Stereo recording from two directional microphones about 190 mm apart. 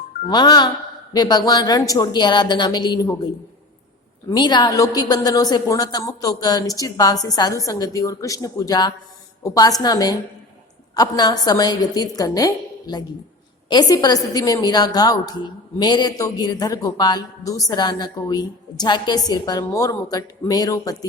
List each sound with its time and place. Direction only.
0.3 s a woman's voice: 20° left (ahead or behind)
4.3 s a woman's voice: 20° left (ahead or behind)